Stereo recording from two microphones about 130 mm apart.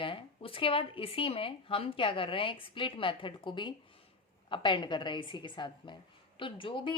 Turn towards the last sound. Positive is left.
turn(degrees=40)  # may be behind; listen again after turning